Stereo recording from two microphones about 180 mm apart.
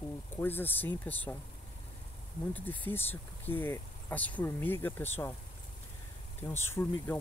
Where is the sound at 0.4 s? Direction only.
10° left (ahead or behind).